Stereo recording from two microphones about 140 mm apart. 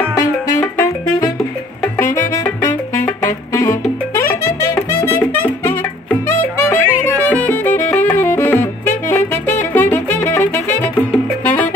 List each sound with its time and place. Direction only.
0.6 s music: 25° left (ahead or behind)